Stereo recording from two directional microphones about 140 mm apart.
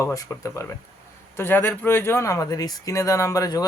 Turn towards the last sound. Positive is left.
turn(degrees=25)  # may be behind; listen again after turning